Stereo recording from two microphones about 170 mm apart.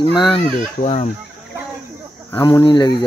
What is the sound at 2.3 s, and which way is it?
Speech, 25° left (ahead or behind).